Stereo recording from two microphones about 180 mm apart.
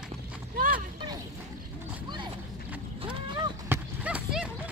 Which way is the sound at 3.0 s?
25° right (ahead or behind).